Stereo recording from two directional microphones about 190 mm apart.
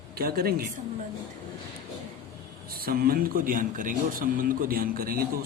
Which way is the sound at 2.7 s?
50° right (ahead or behind).